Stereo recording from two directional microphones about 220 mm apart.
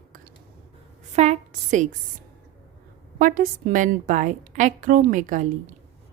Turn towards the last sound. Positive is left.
turn(degrees=-35)  # may be behind; listen again after turning